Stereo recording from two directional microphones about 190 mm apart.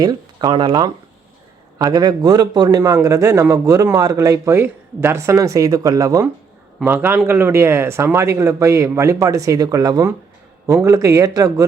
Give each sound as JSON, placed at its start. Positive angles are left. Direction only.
{"t": 0.0, "sound": "a man's voice", "side_deg": -20}